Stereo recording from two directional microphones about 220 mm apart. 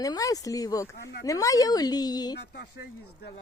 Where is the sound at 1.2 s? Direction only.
15° left (ahead or behind).